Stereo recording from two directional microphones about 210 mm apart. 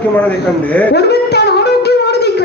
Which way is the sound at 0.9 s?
50° left (ahead or behind).